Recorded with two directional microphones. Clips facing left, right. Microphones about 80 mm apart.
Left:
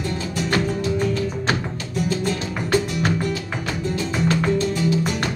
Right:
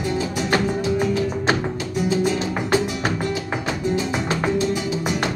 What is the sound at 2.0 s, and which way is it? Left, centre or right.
Music, centre.